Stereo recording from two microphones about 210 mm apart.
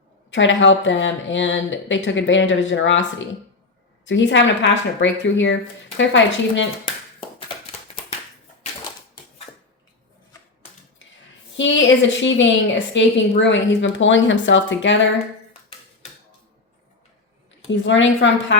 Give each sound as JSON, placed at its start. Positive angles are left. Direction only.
{"t": 0.3, "sound": "speech", "side_deg": 60}
{"t": 11.5, "sound": "speech", "side_deg": 60}
{"t": 17.7, "sound": "speech", "side_deg": 60}